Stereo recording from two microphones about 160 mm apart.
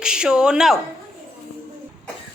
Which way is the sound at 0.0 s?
5° right (ahead or behind).